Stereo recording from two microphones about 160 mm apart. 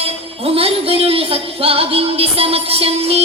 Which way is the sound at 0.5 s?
35° right (ahead or behind).